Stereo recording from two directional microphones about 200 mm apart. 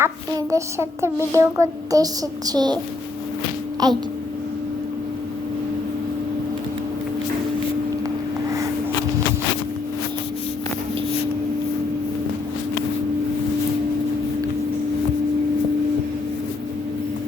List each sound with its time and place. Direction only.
0.0 s a child's voice: 15° right (ahead or behind)
3.8 s a child's voice: 20° right (ahead or behind)